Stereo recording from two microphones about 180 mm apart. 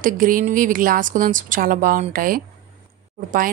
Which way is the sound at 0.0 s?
50° right (ahead or behind).